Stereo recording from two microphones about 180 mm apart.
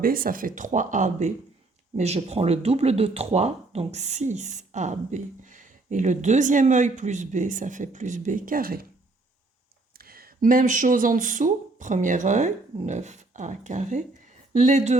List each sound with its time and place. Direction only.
0.0 s speech: 55° right (ahead or behind)
10.0 s speech: 55° right (ahead or behind)